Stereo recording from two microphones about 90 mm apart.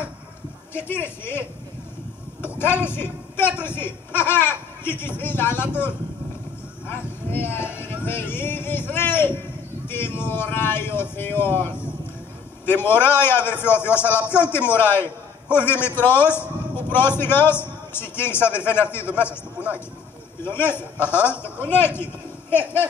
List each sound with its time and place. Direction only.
0.7 s a man's voice: 25° left (ahead or behind)
2.6 s a man's voice: 25° left (ahead or behind)
20.4 s a man's voice: 25° left (ahead or behind)